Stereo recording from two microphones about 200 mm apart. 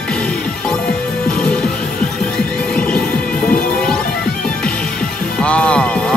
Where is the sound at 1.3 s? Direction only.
5° left (ahead or behind).